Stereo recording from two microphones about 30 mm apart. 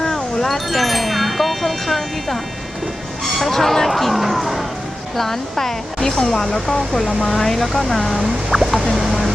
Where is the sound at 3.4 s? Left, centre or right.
Centre.